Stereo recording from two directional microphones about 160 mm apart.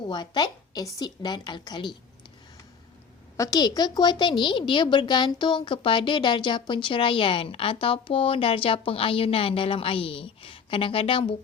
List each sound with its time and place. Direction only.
0.1 s a woman's voice: 30° left (ahead or behind)
3.3 s a woman's voice: 20° left (ahead or behind)